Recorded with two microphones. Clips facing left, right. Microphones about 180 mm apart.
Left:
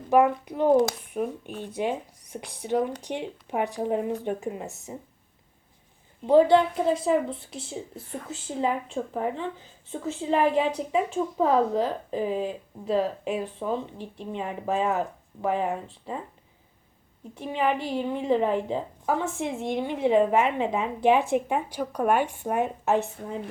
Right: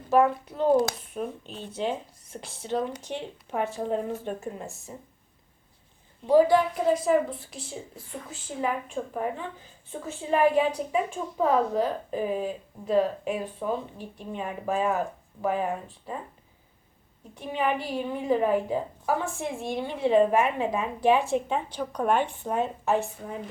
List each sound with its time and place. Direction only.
0.1 s speech: 15° left (ahead or behind)
6.2 s a woman's voice: 25° left (ahead or behind)
17.5 s a woman's voice: 25° left (ahead or behind)